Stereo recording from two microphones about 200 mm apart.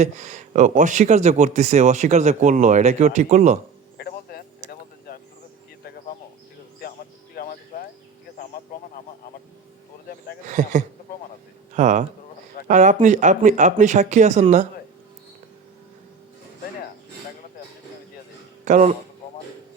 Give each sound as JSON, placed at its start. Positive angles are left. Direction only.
{"t": 0.0, "sound": "speech", "side_deg": -35}
{"t": 3.9, "sound": "a sound", "side_deg": 50}
{"t": 6.8, "sound": "music", "side_deg": 50}
{"t": 10.4, "sound": "speech", "side_deg": -40}
{"t": 18.6, "sound": "a man's voice", "side_deg": -40}